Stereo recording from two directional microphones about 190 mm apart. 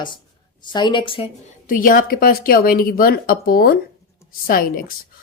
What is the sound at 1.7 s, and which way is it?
Speech, 45° left (ahead or behind).